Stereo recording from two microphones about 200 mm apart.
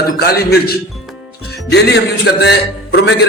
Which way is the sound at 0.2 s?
50° left (ahead or behind).